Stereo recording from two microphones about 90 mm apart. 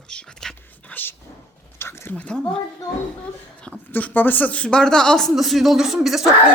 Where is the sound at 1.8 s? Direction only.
30° left (ahead or behind).